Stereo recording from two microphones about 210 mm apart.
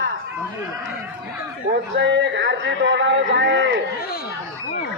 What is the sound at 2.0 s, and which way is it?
A man's voice, 60° right (ahead or behind).